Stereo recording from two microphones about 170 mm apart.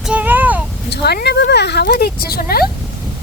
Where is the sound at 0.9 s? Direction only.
75° left (ahead or behind).